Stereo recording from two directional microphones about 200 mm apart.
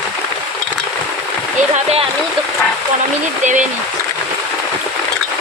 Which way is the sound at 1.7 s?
30° right (ahead or behind).